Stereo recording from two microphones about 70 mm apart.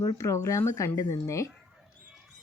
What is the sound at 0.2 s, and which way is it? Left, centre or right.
Speech, left.